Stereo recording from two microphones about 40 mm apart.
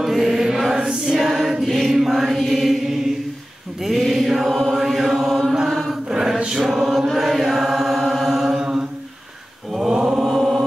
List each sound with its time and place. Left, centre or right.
0.0 s mantra: centre
0.6 s chant: centre
1.0 s music: centre
3.8 s choir: centre
4.6 s chant: centre
6.0 s chant: centre
9.7 s mantra: centre
10.2 s chant: centre